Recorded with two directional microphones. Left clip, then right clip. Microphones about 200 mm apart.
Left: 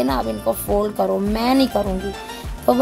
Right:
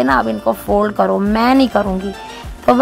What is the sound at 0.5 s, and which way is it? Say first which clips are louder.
Speech: right 3 dB; 30° right (ahead or behind).